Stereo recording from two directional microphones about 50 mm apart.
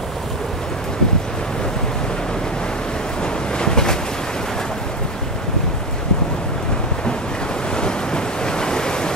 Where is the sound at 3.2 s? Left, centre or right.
Centre.